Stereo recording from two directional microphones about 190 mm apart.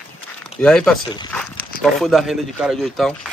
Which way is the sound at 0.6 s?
5° left (ahead or behind).